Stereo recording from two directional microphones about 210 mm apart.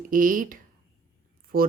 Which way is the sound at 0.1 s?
40° right (ahead or behind).